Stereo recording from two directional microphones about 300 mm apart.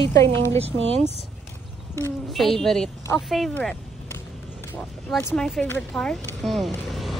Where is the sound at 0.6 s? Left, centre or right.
Centre.